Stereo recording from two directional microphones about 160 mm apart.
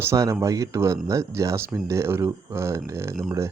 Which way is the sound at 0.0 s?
20° right (ahead or behind).